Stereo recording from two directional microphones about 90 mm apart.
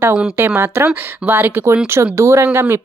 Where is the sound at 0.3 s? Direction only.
25° right (ahead or behind).